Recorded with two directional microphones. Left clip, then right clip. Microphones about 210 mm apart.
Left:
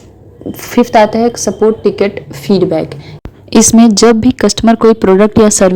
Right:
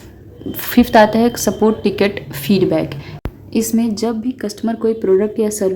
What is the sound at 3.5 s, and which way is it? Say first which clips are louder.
Speech: left 11 dB; 40° left (ahead or behind).